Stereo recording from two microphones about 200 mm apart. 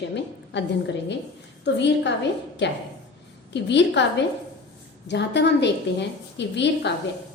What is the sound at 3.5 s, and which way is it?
Speech, 60° left (ahead or behind).